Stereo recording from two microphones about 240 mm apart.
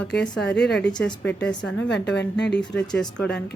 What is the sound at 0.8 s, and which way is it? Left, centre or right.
Speech, centre.